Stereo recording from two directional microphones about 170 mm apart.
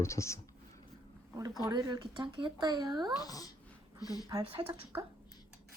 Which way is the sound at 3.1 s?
20° left (ahead or behind).